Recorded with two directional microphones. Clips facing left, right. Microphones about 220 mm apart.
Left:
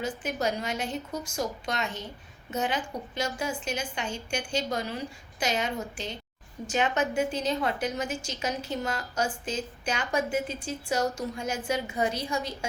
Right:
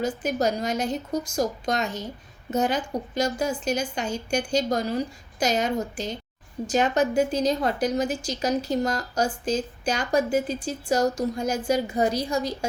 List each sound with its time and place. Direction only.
0.0 s a woman's voice: 40° right (ahead or behind)